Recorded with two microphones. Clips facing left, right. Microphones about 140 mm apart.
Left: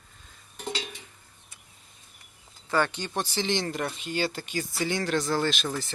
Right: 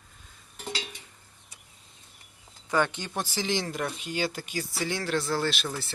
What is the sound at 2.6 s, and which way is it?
Speech, 15° right (ahead or behind).